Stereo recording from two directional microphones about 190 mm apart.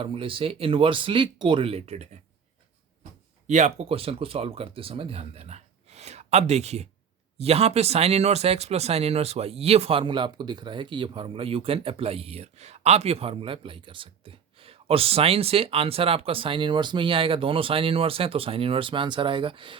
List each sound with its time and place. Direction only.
0.0 s speech: 30° right (ahead or behind)